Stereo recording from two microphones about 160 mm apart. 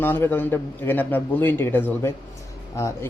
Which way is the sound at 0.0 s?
15° left (ahead or behind).